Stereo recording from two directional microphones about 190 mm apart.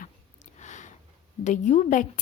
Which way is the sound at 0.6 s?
40° left (ahead or behind).